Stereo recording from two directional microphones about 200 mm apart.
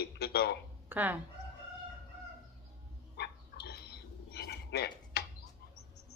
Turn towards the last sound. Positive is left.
turn(degrees=55)  # may be behind; listen again after turning